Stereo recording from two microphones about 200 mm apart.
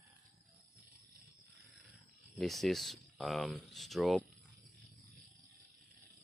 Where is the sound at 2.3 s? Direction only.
Centre (ahead or behind).